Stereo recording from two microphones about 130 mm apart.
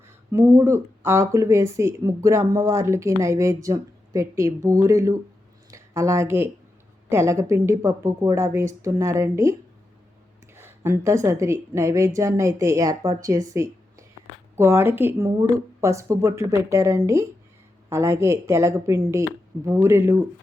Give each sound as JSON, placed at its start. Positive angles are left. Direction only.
{"t": 0.3, "sound": "speech", "side_deg": -20}